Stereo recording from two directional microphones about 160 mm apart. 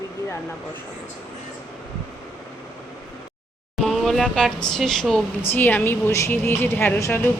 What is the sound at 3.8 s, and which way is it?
Speech, centre (ahead or behind).